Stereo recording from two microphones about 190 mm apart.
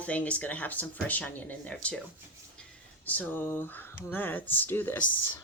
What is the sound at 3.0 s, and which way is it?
Speech, 10° left (ahead or behind).